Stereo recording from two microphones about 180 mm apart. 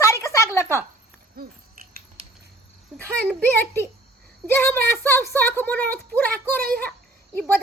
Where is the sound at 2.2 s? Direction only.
35° right (ahead or behind).